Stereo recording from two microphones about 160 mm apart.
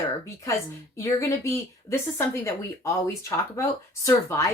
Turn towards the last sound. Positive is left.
turn(degrees=20)  # may be behind; listen again after turning